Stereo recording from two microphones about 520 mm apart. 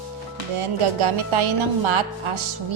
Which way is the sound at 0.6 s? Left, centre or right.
Right.